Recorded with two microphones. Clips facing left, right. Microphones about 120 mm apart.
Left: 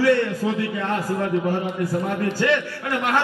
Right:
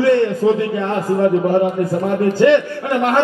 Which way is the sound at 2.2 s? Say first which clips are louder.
Right 10 dB; 25° right (ahead or behind).